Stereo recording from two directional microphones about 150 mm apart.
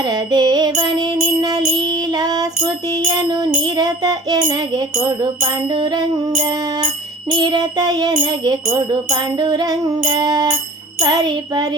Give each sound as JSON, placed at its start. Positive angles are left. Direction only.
{"t": 0.0, "sound": "music", "side_deg": -30}
{"t": 8.6, "sound": "jingle bell", "side_deg": -30}
{"t": 9.0, "sound": "music", "side_deg": -30}